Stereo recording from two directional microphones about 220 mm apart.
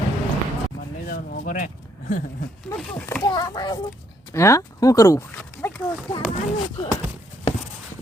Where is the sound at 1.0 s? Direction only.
40° left (ahead or behind).